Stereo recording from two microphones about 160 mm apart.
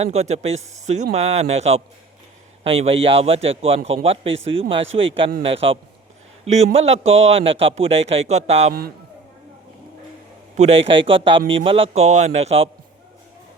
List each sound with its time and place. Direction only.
0.0 s a man's voice: 40° right (ahead or behind)
10.6 s a man's voice: 40° right (ahead or behind)